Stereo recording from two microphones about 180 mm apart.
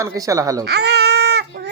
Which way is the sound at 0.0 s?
20° right (ahead or behind).